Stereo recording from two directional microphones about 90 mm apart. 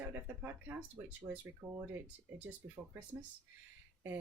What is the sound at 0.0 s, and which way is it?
Speech, 20° right (ahead or behind).